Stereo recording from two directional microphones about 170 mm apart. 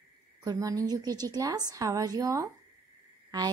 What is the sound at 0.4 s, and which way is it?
A woman's voice, 20° right (ahead or behind).